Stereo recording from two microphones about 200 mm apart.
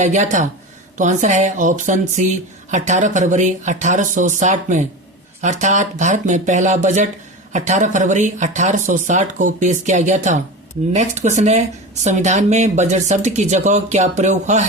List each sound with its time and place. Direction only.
0.0 s speech: 35° right (ahead or behind)